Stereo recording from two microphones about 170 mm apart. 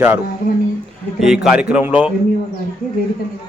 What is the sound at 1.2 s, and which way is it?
Speech, 5° right (ahead or behind).